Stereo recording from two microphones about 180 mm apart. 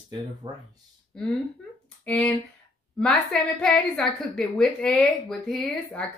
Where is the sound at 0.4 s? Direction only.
20° right (ahead or behind).